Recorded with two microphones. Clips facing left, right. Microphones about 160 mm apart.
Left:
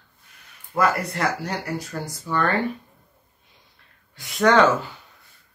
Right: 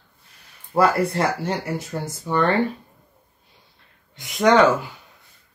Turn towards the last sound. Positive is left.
turn(degrees=-15)  # may be behind; listen again after turning